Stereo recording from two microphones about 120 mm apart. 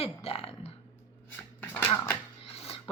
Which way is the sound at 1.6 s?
15° left (ahead or behind).